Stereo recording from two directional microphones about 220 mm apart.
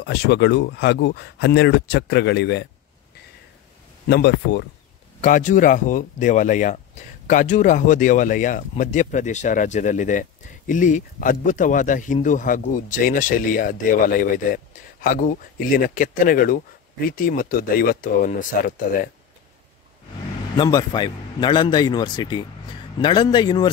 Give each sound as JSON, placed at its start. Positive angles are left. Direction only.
{"t": 0.0, "sound": "speech", "side_deg": 50}
{"t": 4.1, "sound": "speech", "side_deg": 50}
{"t": 5.2, "sound": "speech", "side_deg": 35}
{"t": 20.5, "sound": "a man's voice", "side_deg": 20}